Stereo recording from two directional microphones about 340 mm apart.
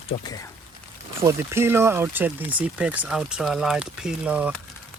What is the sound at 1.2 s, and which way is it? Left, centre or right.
Speech, centre.